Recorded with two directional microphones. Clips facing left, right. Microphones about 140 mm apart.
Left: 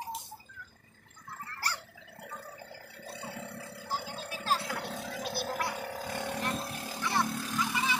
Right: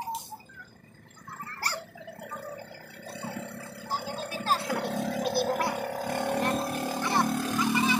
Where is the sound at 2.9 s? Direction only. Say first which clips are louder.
Right 4 dB; 55° right (ahead or behind).